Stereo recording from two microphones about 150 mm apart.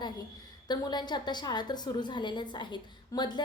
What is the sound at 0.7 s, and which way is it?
A woman's voice, 30° left (ahead or behind).